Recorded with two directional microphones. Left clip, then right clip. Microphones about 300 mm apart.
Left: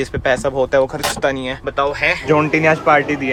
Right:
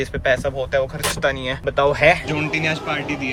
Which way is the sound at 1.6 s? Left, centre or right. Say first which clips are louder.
Right 2 dB; centre.